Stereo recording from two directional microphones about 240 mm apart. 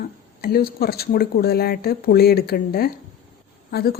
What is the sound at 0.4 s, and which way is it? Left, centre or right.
Speech, left.